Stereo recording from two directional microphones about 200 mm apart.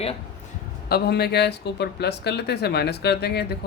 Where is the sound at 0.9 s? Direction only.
55° left (ahead or behind).